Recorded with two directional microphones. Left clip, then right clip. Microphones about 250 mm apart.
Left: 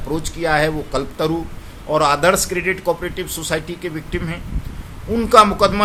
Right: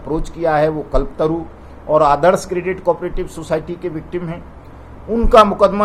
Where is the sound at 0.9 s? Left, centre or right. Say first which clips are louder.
Right 3 dB; left.